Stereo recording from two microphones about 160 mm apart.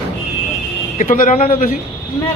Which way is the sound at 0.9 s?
55° left (ahead or behind).